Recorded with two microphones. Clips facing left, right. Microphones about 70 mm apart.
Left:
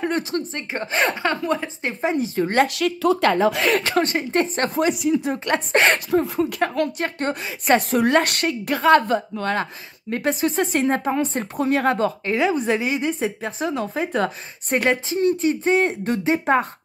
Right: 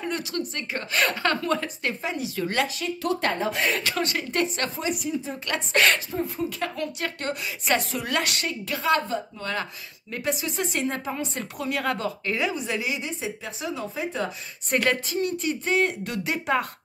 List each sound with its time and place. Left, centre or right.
0.0 s a woman's voice: left
1.3 s a woman's voice: centre
2.0 s a woman's voice: left
2.7 s a woman's voice: left
3.8 s a woman's voice: left
4.6 s speech: left
5.4 s a woman's voice: left
6.0 s speech: left
6.6 s speech: left
7.0 s a woman's voice: left
9.6 s a woman's voice: left
12.5 s a woman's voice: left
14.8 s a woman's voice: left
15.1 s a woman's voice: left